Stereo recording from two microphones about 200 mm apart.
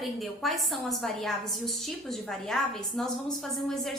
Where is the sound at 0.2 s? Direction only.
Centre (ahead or behind).